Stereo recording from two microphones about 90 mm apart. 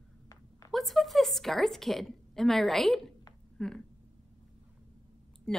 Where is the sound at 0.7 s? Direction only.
Centre (ahead or behind).